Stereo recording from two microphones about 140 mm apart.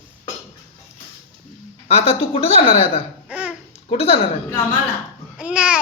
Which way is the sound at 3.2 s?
10° right (ahead or behind).